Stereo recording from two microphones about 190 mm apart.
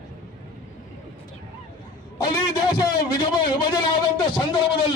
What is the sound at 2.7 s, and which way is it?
A man's voice, 20° left (ahead or behind).